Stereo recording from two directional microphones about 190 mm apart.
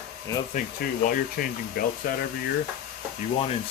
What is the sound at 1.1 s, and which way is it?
Speech, 50° left (ahead or behind).